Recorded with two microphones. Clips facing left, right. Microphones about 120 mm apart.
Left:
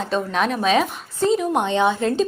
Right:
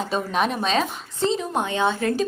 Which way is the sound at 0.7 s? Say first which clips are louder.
Left 4 dB; 10° left (ahead or behind).